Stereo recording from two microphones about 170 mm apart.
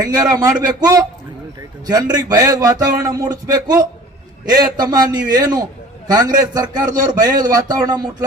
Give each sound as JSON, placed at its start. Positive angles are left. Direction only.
{"t": 0.0, "sound": "speech", "side_deg": -20}